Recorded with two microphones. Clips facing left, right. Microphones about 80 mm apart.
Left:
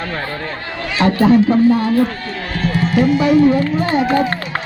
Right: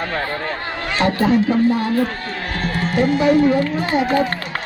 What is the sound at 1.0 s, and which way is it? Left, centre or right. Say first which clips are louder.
Speech: left 3 dB; centre.